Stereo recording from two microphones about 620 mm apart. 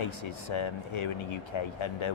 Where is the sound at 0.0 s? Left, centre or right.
Left.